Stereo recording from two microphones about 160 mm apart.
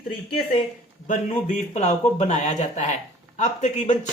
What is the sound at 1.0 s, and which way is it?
Speech, 50° left (ahead or behind).